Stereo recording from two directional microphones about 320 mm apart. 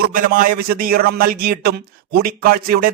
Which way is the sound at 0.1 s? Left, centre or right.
Right.